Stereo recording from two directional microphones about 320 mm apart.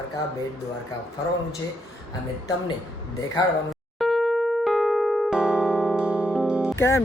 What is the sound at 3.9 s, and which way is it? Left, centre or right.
Electric piano, centre.